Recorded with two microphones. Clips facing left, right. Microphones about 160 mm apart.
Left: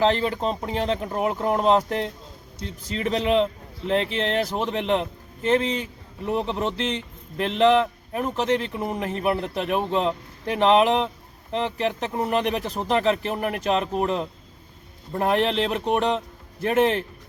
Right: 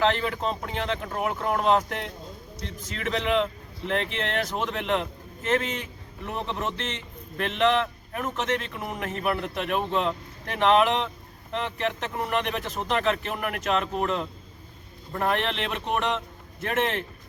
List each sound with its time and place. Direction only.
0.0 s speech: 30° left (ahead or behind)